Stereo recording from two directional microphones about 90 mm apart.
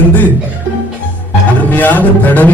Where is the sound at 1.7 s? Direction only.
20° left (ahead or behind).